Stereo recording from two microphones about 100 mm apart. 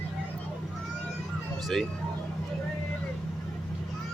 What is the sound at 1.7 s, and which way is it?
Speech, 5° left (ahead or behind).